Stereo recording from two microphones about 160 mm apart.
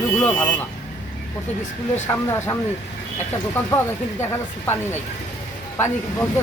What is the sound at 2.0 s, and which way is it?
Speech, 15° left (ahead or behind).